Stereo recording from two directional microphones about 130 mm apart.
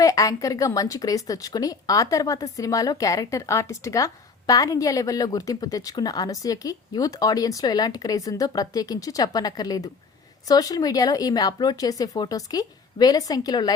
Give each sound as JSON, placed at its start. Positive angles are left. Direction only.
{"t": 0.0, "sound": "a woman's voice", "side_deg": 25}